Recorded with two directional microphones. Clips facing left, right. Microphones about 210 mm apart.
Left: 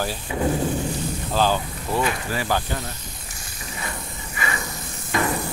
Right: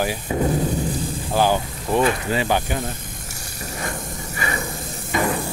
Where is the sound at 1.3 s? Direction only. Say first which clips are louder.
Right 3 dB; 15° right (ahead or behind).